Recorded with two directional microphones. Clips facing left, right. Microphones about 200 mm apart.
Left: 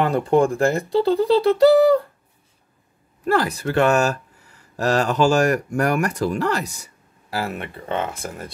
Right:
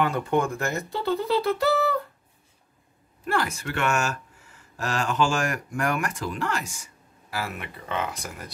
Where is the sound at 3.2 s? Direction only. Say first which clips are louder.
Left 7 dB; 35° left (ahead or behind).